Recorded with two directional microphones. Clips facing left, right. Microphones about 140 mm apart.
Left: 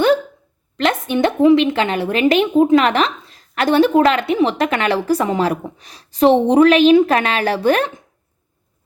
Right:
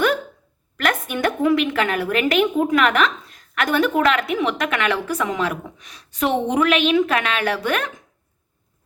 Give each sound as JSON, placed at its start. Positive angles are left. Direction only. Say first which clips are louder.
{"t": 0.8, "sound": "a woman's voice", "louder": "left 5 dB", "side_deg": 25}